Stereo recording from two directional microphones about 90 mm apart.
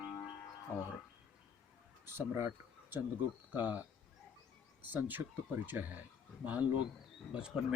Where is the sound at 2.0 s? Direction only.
30° right (ahead or behind).